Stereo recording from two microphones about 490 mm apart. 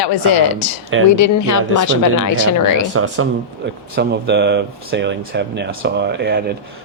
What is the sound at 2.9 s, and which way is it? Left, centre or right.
Speech, right.